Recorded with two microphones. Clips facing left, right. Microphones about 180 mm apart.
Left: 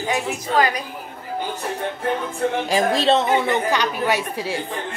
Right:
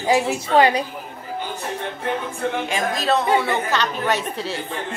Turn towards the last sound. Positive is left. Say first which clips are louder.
# left 1 dB
turn(degrees=10)  # may be behind; listen again after turning